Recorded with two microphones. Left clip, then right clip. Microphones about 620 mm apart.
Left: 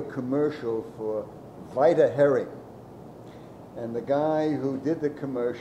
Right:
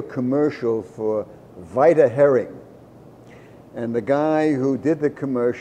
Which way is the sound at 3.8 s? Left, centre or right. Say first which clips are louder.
Right 5 dB; right.